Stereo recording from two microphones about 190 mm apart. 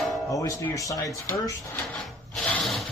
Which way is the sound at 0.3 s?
15° left (ahead or behind).